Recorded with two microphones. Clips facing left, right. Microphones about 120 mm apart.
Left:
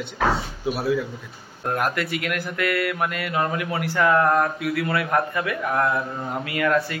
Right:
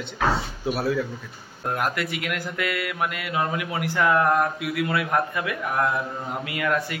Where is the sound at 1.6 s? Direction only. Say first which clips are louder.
Left 2 dB; 10° right (ahead or behind).